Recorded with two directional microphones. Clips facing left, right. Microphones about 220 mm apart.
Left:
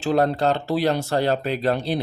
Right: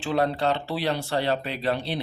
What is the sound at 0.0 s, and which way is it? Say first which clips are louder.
Speech: left 4 dB; 45° left (ahead or behind).